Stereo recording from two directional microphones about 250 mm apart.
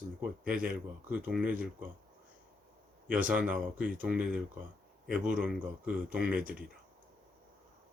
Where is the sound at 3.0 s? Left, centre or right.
Centre.